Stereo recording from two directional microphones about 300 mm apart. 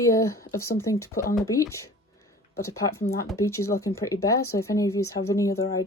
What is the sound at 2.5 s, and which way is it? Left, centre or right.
Speech, left.